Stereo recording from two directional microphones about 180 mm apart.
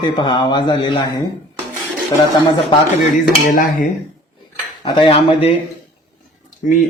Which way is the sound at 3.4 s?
55° left (ahead or behind).